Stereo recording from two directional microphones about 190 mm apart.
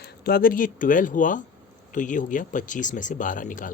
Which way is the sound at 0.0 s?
50° left (ahead or behind).